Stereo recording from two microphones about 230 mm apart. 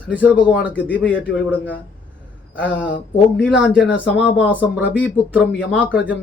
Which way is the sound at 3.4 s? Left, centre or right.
Centre.